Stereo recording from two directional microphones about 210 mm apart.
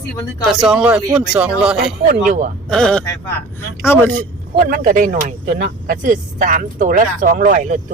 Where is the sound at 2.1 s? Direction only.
40° right (ahead or behind).